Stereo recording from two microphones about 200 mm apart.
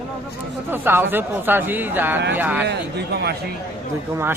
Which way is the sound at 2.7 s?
55° right (ahead or behind).